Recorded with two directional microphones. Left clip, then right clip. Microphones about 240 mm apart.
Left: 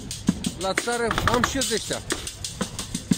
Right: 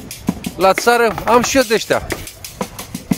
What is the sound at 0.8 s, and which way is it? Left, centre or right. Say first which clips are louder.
Speech: right 10 dB; right.